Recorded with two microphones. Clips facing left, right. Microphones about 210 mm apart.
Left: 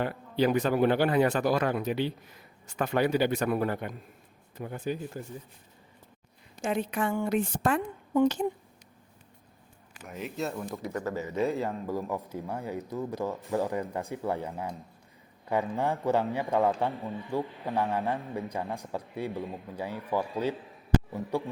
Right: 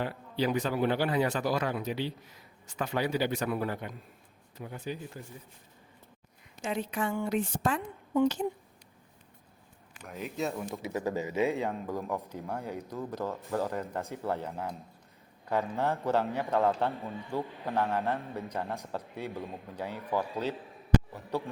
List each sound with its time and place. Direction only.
0.0 s speech: 55° left (ahead or behind)
6.6 s speech: 55° left (ahead or behind)
10.0 s speech: centre (ahead or behind); by 11.3 s 15° right (ahead or behind)
11.3 s speech: centre (ahead or behind)